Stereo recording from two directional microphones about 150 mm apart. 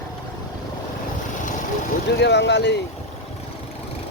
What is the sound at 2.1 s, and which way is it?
Speech, 90° left.